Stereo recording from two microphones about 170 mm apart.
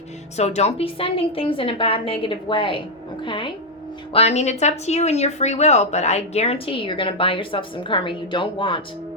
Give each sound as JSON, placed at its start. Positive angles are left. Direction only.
{"t": 0.3, "sound": "a woman's voice", "side_deg": 40}
{"t": 4.1, "sound": "speech", "side_deg": 40}